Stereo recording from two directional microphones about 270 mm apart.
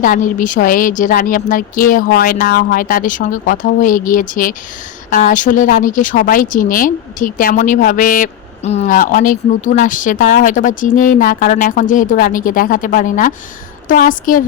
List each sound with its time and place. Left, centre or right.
0.0 s a woman's voice: left